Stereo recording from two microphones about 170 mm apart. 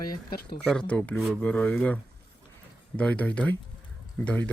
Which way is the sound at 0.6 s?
5° left (ahead or behind).